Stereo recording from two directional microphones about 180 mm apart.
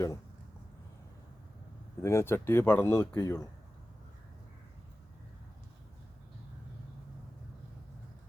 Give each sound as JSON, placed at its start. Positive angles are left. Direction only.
{"t": 2.0, "sound": "speech", "side_deg": 15}